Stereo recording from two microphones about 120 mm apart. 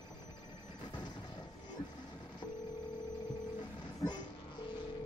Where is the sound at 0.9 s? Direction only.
35° left (ahead or behind).